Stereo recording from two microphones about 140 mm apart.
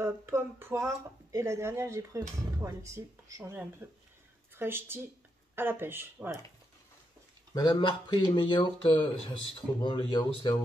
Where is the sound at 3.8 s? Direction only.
10° right (ahead or behind).